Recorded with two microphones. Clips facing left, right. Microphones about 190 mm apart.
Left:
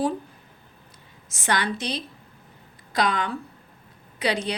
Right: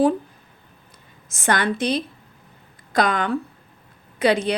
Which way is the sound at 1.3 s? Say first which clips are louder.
Right 4 dB; 50° right (ahead or behind).